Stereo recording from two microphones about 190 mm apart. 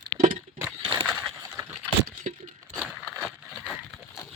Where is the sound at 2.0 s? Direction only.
40° right (ahead or behind).